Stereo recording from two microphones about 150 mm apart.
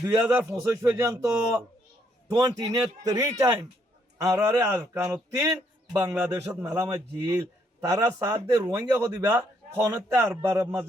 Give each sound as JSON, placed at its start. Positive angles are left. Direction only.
{"t": 0.0, "sound": "a man's voice", "side_deg": -20}